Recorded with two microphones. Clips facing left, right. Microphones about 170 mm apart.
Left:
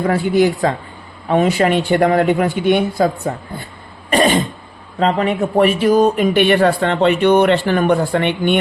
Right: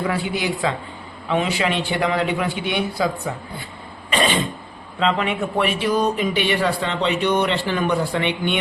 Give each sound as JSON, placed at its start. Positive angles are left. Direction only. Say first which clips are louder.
{"t": 0.1, "sound": "speech", "louder": "left 9 dB", "side_deg": 45}